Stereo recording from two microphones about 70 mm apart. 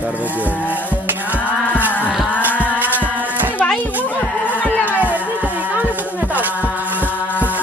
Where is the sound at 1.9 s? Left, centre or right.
Left.